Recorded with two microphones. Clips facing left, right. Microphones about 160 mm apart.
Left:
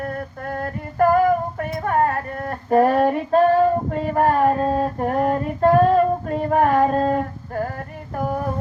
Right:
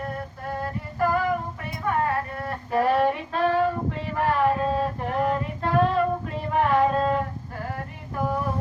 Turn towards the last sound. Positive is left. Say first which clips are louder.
# left 5 dB
turn(degrees=45)  # may be behind; listen again after turning